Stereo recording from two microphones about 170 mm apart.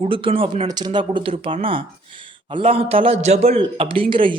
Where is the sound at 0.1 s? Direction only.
30° right (ahead or behind).